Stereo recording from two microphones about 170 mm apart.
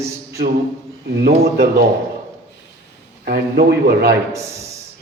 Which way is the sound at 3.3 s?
65° right (ahead or behind).